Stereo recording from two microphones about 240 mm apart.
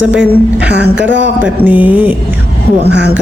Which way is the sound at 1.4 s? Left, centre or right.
Centre.